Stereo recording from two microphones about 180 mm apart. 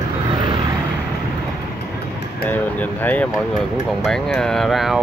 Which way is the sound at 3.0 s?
10° left (ahead or behind).